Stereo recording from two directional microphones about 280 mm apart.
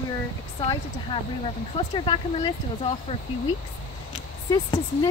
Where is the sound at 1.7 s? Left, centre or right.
Centre.